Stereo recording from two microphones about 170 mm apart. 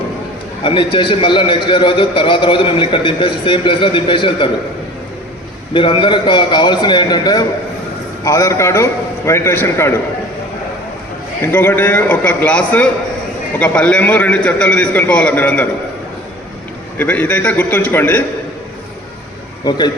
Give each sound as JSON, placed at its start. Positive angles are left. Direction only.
{"t": 0.6, "sound": "a man's voice", "side_deg": 30}
{"t": 5.7, "sound": "a man's voice", "side_deg": 30}
{"t": 11.5, "sound": "a man's voice", "side_deg": 10}
{"t": 17.0, "sound": "a man's voice", "side_deg": 10}
{"t": 19.6, "sound": "a man's voice", "side_deg": 25}